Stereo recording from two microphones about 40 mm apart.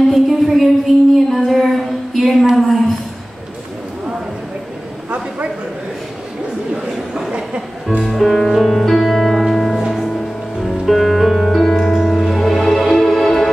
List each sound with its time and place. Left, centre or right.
0.1 s a sound: centre
7.3 s music: right
8.0 s music: centre